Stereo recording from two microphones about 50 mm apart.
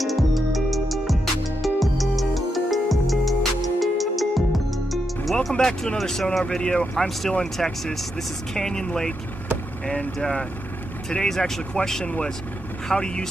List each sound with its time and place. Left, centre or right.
0.0 s music: centre
5.5 s speech: centre
6.4 s speech: left
7.5 s speech: centre
10.1 s speech: centre